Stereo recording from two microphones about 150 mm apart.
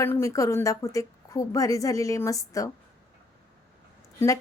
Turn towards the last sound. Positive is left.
turn(degrees=20)  # may be behind; listen again after turning